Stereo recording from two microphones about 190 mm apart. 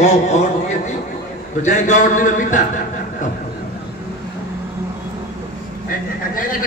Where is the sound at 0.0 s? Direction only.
35° left (ahead or behind).